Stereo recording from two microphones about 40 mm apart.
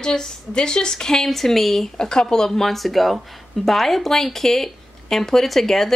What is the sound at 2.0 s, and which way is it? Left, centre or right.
Speech, centre.